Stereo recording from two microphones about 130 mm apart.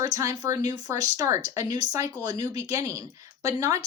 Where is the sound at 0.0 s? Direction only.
25° right (ahead or behind).